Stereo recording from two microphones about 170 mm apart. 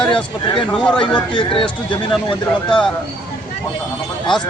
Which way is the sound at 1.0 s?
30° left (ahead or behind).